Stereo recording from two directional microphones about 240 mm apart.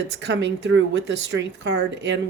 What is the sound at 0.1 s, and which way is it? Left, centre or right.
Speech, right.